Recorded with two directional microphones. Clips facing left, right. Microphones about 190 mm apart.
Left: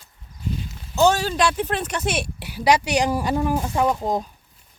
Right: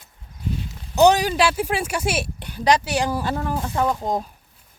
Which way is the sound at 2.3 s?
5° left (ahead or behind).